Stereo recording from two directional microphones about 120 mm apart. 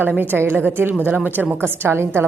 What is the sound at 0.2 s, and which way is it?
A woman's voice, 15° right (ahead or behind).